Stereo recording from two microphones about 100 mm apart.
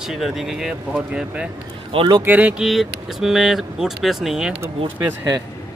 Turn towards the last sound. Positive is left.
turn(degrees=-30)  # may be behind; listen again after turning